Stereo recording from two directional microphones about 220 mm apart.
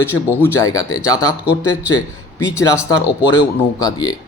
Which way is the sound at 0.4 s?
10° left (ahead or behind).